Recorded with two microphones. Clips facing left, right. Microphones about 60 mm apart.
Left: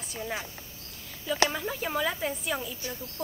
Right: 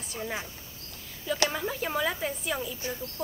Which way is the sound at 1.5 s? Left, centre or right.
Centre.